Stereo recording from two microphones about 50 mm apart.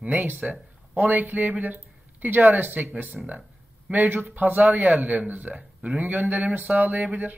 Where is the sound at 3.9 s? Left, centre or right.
Right.